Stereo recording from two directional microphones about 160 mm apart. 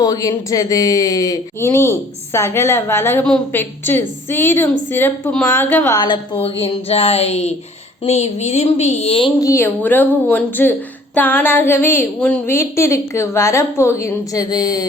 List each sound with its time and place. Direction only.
0.0 s speech: 20° left (ahead or behind)
6.0 s a woman's voice: 35° left (ahead or behind)
9.4 s speech: 15° left (ahead or behind)